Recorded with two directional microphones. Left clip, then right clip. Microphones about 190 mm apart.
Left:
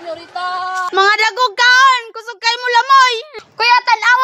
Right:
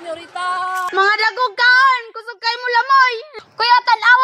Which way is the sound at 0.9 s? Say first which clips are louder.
Left 3 dB; 35° left (ahead or behind).